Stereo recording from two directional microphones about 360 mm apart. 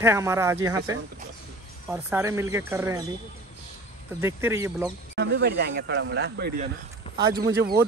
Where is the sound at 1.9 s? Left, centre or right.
Centre.